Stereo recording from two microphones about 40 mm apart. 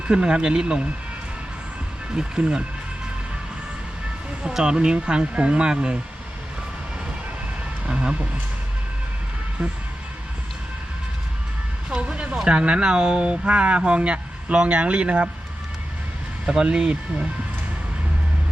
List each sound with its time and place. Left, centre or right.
0.1 s speech: right
2.1 s speech: right
4.4 s speech: centre
7.9 s speech: right
11.9 s speech: right
16.5 s speech: right